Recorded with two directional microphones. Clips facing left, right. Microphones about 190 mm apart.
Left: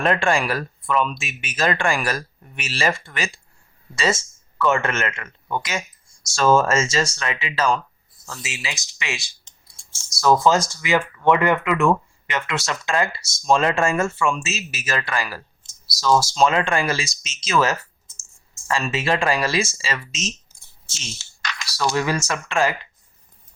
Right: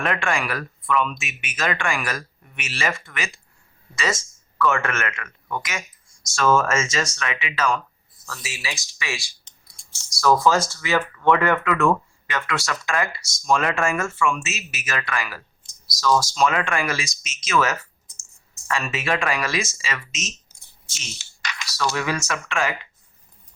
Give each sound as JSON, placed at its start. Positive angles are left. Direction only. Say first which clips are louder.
{"t": 0.0, "sound": "speech", "louder": "left 4 dB", "side_deg": 30}
{"t": 8.3, "sound": "speech", "louder": "left 1 dB", "side_deg": 20}
{"t": 21.9, "sound": "speech", "louder": "left 3 dB", "side_deg": 35}